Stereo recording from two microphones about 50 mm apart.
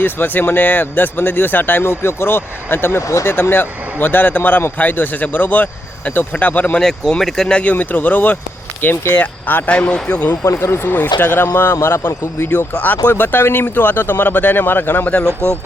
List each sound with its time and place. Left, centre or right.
0.0 s speech: left
6.7 s speech: centre
7.6 s speech: left
10.4 s speech: left
10.9 s speech: left
12.5 s speech: left